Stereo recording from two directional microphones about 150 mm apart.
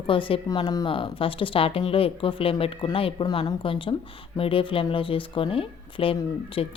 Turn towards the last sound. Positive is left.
turn(degrees=35)  # may be behind; listen again after turning